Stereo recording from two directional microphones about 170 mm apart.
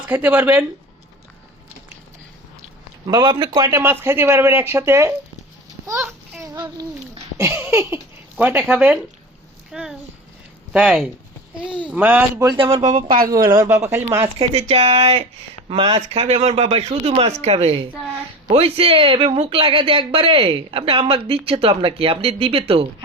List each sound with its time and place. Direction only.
0.1 s speech: 10° right (ahead or behind)
3.1 s speech: 25° right (ahead or behind)
5.9 s a sound: 15° right (ahead or behind)
6.4 s babbling: 20° right (ahead or behind)
8.4 s a child's voice: 10° right (ahead or behind)
12.4 s speech: 25° right (ahead or behind)
14.3 s speech: 35° right (ahead or behind)